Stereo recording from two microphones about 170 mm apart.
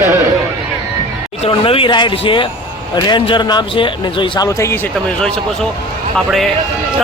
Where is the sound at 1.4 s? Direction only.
35° left (ahead or behind).